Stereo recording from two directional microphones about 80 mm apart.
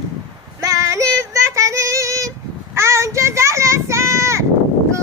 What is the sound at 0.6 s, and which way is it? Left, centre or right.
Child singing, right.